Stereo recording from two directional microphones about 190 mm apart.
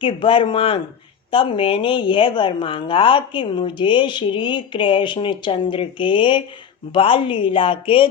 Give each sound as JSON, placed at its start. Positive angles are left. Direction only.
{"t": 0.0, "sound": "a woman's voice", "side_deg": 25}